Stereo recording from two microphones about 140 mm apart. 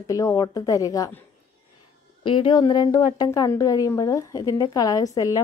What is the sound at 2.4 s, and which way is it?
Speech, 35° left (ahead or behind).